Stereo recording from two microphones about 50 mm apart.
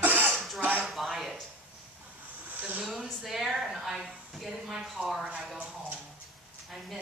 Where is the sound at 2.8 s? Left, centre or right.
Centre.